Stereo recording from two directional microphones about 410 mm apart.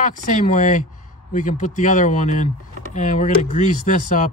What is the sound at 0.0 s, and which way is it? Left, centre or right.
Speech, centre.